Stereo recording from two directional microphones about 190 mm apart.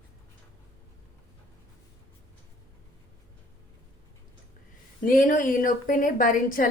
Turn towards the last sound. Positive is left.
turn(degrees=45)  # may be behind; listen again after turning